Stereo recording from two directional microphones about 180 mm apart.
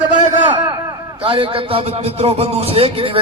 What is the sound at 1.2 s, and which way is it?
Speech, 30° right (ahead or behind).